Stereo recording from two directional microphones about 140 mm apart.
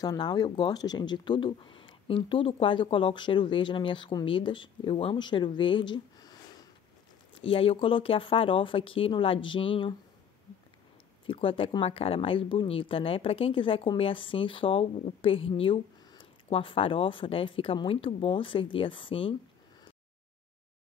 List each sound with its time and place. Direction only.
0.0 s speech: 30° left (ahead or behind)
7.3 s speech: 40° left (ahead or behind)
11.2 s speech: 40° left (ahead or behind)